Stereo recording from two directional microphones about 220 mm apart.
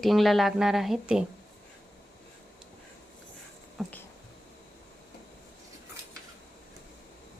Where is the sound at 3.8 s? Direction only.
Centre (ahead or behind).